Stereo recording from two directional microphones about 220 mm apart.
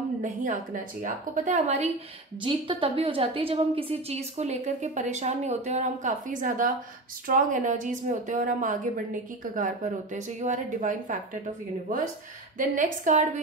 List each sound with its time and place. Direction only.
0.2 s a woman's voice: 35° right (ahead or behind)
12.5 s a woman's voice: 35° right (ahead or behind)